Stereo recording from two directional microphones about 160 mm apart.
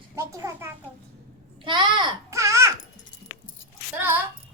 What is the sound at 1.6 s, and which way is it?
A child's voice, 30° right (ahead or behind).